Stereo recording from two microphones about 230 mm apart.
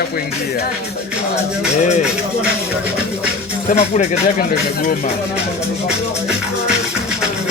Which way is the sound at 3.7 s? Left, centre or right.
Left.